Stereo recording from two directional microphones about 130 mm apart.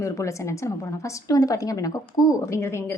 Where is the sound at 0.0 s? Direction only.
25° left (ahead or behind).